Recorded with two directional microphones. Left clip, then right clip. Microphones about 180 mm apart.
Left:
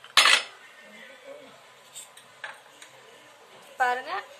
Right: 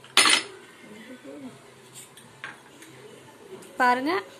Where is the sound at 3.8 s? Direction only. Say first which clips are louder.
Right 4 dB; 45° right (ahead or behind).